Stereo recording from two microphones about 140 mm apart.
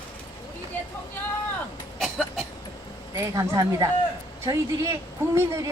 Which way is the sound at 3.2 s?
20° right (ahead or behind).